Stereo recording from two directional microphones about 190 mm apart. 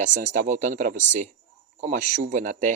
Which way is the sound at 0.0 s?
40° right (ahead or behind).